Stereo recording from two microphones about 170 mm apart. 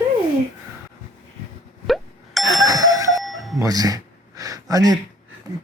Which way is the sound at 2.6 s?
20° right (ahead or behind).